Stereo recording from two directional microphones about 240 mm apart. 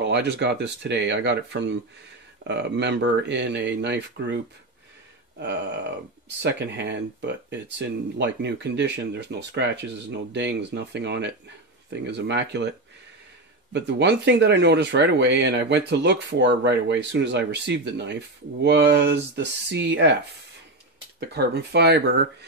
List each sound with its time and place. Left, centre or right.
0.0 s speech: right
6.2 s speech: right
13.7 s speech: right
21.2 s speech: right